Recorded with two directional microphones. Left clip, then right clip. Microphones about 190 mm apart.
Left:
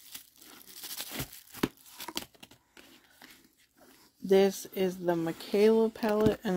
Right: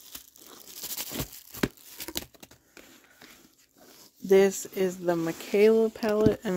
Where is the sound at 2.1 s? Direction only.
20° right (ahead or behind).